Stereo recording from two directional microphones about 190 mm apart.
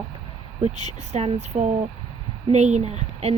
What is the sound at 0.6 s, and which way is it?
Speech, 35° right (ahead or behind).